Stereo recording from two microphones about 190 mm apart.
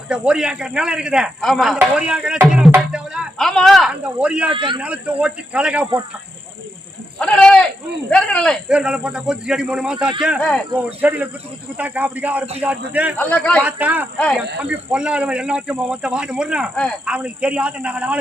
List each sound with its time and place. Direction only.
0.1 s a man's voice: 5° right (ahead or behind)
4.5 s a man's voice: 25° right (ahead or behind)
4.8 s speech: 5° right (ahead or behind)
7.2 s a sound: 5° left (ahead or behind)
8.1 s a man's voice: 5° left (ahead or behind)
13.3 s a man's voice: 5° left (ahead or behind)
13.6 s a man's voice: 10° right (ahead or behind)